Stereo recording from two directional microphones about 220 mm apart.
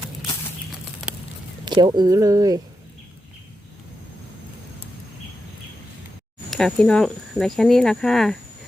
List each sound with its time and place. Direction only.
1.6 s speech: 20° right (ahead or behind)
6.5 s speech: 5° left (ahead or behind)